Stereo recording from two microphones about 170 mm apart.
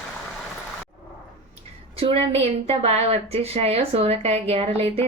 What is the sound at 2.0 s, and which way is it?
A woman's voice, 30° right (ahead or behind).